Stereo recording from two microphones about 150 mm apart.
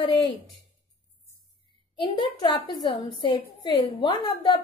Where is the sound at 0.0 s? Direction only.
30° left (ahead or behind).